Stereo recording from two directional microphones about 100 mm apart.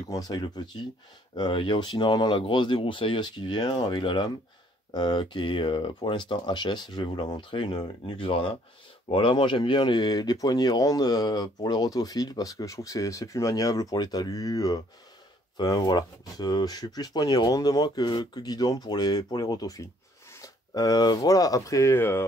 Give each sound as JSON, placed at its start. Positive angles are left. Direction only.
{"t": 0.1, "sound": "speech", "side_deg": 40}